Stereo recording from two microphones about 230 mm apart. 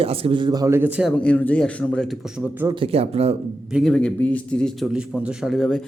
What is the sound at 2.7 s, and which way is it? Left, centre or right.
Speech, right.